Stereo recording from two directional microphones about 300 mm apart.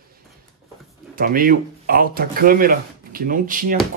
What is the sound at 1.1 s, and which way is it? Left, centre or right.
Speech, right.